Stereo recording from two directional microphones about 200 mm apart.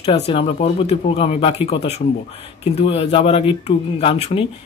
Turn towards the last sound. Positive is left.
turn(degrees=30)  # may be behind; listen again after turning